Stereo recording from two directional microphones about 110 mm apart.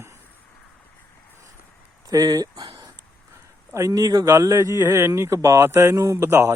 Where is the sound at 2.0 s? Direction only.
35° right (ahead or behind).